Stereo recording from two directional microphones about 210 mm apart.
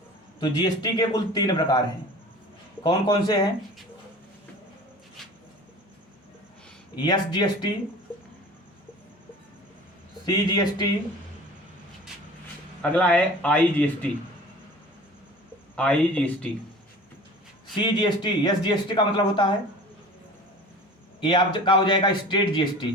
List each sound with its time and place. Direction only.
0.3 s speech: 20° left (ahead or behind)
2.8 s speech: 20° left (ahead or behind)
7.0 s speech: 20° left (ahead or behind)
10.2 s speech: 20° left (ahead or behind)
12.8 s speech: 5° left (ahead or behind)
15.7 s speech: 5° left (ahead or behind)
17.7 s speech: 20° left (ahead or behind)
21.2 s speech: 20° left (ahead or behind)